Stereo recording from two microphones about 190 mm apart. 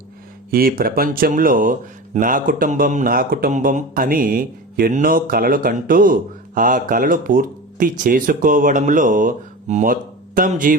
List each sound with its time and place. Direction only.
0.5 s speech: 50° right (ahead or behind)